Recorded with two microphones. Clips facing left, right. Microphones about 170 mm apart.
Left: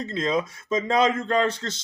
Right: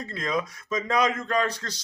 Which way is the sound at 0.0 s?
25° left (ahead or behind).